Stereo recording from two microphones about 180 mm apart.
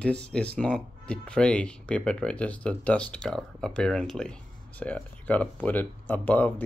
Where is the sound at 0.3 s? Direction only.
5° left (ahead or behind).